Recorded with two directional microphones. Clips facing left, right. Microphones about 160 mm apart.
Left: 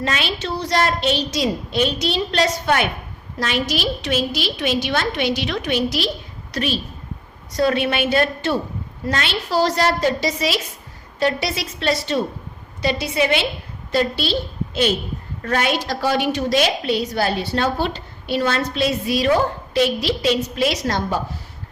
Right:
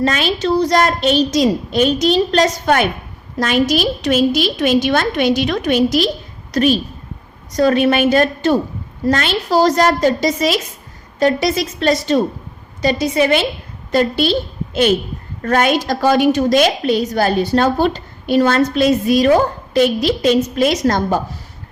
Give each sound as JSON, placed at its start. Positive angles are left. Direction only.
{"t": 0.0, "sound": "a woman's voice", "side_deg": -45}